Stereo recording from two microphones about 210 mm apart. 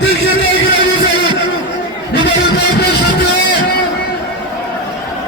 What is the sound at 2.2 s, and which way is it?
Music, 50° left (ahead or behind).